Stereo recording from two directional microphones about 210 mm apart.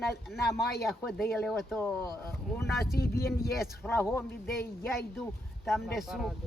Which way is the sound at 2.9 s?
50° left (ahead or behind).